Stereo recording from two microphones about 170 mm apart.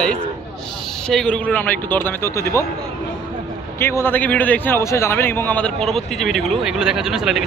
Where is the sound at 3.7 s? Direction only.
15° left (ahead or behind); by 7.5 s 5° right (ahead or behind).